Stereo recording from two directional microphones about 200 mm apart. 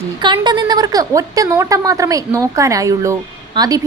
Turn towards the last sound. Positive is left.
turn(degrees=-20)  # may be behind; listen again after turning